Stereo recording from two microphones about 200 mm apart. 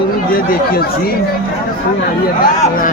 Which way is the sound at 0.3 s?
50° left (ahead or behind).